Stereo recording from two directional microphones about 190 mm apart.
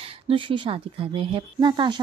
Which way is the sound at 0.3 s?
25° right (ahead or behind).